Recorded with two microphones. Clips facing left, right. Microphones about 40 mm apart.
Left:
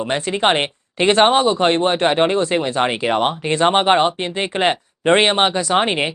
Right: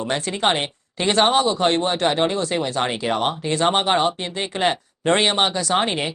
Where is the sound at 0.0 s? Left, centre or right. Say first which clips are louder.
Left 3 dB; left.